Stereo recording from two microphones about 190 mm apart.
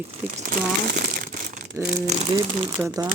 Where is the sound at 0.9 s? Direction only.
60° right (ahead or behind).